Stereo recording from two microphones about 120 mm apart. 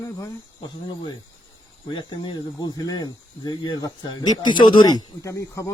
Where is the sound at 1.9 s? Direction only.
40° left (ahead or behind).